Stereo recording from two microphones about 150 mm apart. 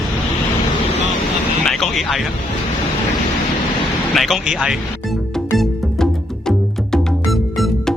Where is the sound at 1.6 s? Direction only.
Centre (ahead or behind).